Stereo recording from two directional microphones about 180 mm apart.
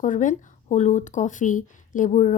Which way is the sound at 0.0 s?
45° left (ahead or behind).